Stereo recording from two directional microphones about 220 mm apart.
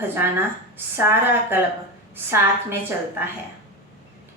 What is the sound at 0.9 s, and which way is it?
Speech, 10° right (ahead or behind).